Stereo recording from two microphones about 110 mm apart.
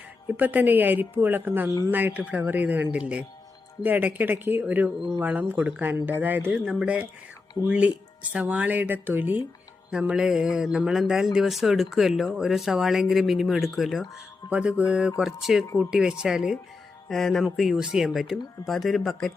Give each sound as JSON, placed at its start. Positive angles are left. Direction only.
{"t": 0.3, "sound": "speech", "side_deg": -15}
{"t": 6.5, "sound": "speech", "side_deg": -5}
{"t": 14.5, "sound": "speech", "side_deg": -10}